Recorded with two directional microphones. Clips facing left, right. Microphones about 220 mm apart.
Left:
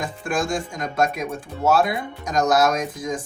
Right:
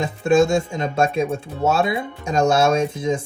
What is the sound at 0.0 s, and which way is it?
Speech, 25° right (ahead or behind).